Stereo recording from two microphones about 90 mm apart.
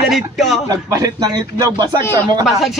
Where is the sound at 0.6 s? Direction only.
40° right (ahead or behind).